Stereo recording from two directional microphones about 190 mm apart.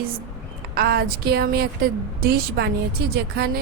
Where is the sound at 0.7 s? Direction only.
55° right (ahead or behind).